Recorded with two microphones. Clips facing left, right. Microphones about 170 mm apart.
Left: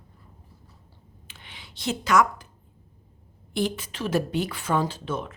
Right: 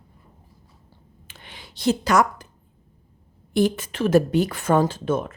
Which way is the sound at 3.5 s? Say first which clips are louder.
Right 7 dB; 45° right (ahead or behind).